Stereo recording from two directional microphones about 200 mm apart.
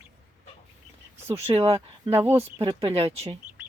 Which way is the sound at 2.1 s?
10° right (ahead or behind).